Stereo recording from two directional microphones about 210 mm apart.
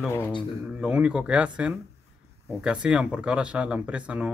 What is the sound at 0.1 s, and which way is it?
Speech, 15° left (ahead or behind).